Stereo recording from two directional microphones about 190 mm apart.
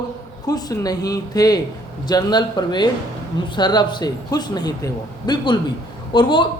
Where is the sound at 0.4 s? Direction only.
20° left (ahead or behind).